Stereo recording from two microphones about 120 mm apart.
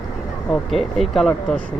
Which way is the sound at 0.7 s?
Centre (ahead or behind).